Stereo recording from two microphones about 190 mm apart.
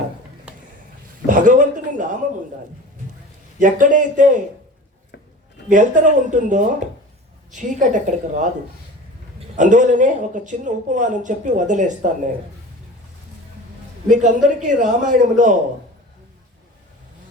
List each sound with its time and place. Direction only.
0.5 s a sound: 5° right (ahead or behind)
1.3 s a sound: 45° right (ahead or behind)
3.6 s speech: 45° right (ahead or behind)
5.6 s speech: 40° right (ahead or behind)
9.6 s speech: 40° right (ahead or behind)
14.1 s speech: 40° right (ahead or behind)